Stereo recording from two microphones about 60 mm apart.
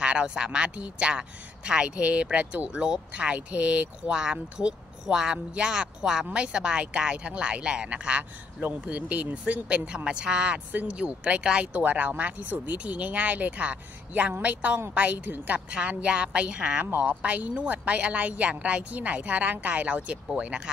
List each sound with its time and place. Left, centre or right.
0.0 s speech: centre